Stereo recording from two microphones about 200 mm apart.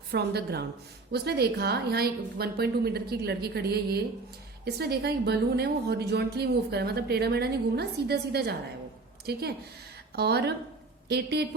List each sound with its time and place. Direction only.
0.1 s a woman's voice: 55° right (ahead or behind)